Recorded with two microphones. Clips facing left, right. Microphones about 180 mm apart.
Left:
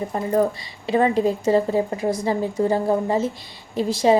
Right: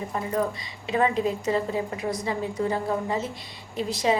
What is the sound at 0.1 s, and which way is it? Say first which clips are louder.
Speech: left 6 dB; 35° left (ahead or behind).